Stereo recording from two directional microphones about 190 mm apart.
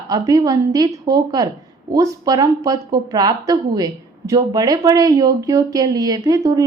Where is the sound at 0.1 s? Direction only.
20° right (ahead or behind).